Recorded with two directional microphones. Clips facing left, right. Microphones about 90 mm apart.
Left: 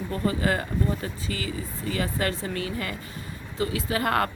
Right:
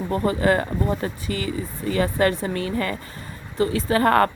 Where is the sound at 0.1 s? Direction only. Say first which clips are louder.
Right 6 dB; 35° right (ahead or behind).